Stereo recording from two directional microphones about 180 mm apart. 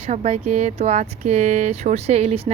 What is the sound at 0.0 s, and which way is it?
Speech, 40° right (ahead or behind).